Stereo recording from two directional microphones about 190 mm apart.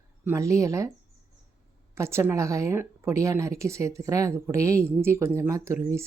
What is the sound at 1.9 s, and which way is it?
Speech, 15° right (ahead or behind).